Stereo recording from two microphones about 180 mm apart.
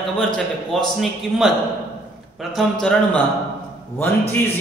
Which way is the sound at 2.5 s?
Centre (ahead or behind).